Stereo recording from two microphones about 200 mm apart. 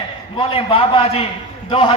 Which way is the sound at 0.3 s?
25° left (ahead or behind).